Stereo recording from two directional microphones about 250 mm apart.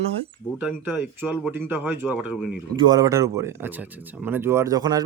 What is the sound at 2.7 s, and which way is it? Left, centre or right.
Speech, centre.